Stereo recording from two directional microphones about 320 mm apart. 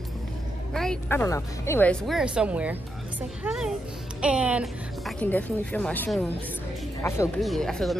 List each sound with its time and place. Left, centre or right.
0.7 s speech: centre